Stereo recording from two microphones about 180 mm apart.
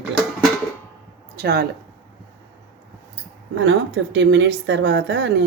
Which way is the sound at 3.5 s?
85° right.